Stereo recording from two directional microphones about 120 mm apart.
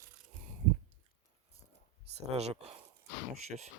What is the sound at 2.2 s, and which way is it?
Speech, 60° right (ahead or behind).